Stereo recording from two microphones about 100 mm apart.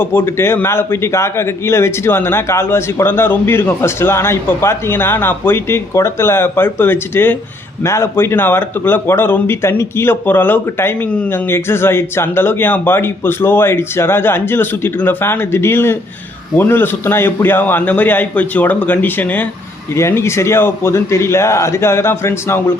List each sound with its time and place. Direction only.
0.0 s a man's voice: 20° left (ahead or behind)